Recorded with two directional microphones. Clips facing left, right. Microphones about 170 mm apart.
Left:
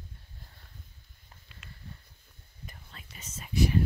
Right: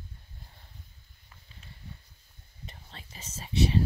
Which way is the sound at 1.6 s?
75° left (ahead or behind).